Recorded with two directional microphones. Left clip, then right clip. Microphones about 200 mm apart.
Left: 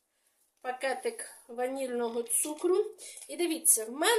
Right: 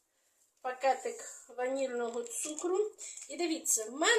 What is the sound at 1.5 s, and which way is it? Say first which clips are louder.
Speech: left 1 dB; 45° left (ahead or behind).